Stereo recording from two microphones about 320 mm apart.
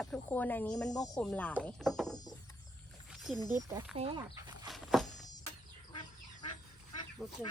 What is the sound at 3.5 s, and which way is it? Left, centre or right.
Speech, centre.